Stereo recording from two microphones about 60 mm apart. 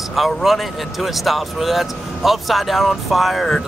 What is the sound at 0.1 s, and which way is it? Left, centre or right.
Speech, centre.